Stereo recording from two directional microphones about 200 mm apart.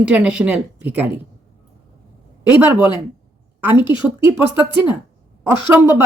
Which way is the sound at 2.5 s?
10° right (ahead or behind).